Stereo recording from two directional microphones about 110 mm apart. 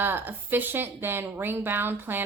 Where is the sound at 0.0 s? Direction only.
20° right (ahead or behind).